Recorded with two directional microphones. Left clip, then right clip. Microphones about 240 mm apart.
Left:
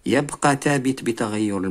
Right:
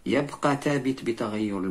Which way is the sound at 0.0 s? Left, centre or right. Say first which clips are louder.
Left 5 dB; left.